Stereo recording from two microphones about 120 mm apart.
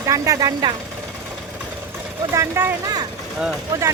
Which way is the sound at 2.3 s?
20° right (ahead or behind).